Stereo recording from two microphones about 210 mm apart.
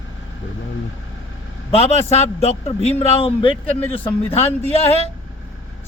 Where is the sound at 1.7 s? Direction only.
30° left (ahead or behind).